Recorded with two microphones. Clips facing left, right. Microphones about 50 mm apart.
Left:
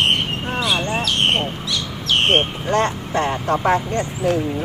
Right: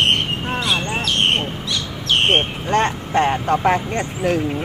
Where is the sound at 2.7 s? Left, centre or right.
Right.